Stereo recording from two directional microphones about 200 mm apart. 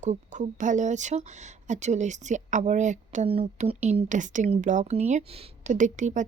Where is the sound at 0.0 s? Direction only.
35° right (ahead or behind).